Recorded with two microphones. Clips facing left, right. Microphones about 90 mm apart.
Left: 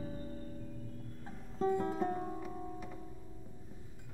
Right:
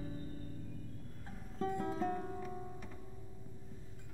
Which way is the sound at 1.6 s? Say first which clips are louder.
Left 4 dB; 20° left (ahead or behind).